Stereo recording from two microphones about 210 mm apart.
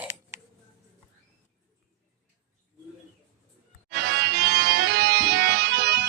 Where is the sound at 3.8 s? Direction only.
55° right (ahead or behind).